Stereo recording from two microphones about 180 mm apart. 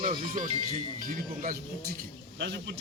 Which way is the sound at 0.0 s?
35° right (ahead or behind).